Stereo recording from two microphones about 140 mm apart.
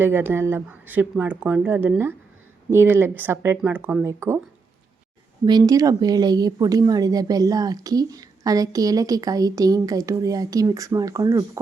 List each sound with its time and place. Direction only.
0.0 s speech: 15° right (ahead or behind)
5.5 s speech: 30° right (ahead or behind)